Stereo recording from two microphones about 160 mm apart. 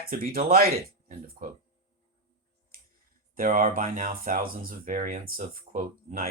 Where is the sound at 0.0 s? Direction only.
65° right (ahead or behind).